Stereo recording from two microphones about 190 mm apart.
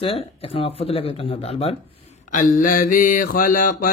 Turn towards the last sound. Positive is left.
turn(degrees=45)  # may be behind; listen again after turning